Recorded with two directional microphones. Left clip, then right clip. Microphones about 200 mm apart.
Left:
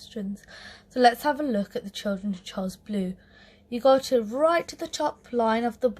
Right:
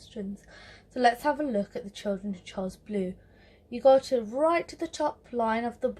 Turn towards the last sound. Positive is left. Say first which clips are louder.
# left 4 dB
turn(degrees=40)  # may be behind; listen again after turning